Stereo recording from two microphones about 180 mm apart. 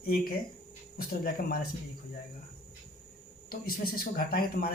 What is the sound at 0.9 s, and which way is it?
Speech, 55° left (ahead or behind).